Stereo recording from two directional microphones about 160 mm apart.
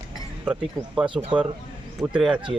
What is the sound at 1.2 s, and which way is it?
Speech, centre (ahead or behind).